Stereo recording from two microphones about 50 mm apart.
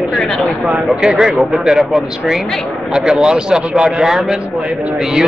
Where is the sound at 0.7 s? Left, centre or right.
Centre.